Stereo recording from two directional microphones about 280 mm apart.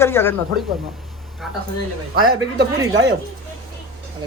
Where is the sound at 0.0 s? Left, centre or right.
Centre.